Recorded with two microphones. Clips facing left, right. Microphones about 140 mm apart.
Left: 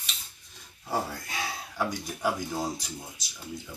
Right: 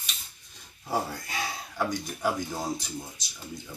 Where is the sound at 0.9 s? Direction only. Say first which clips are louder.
Right 1 dB; centre (ahead or behind).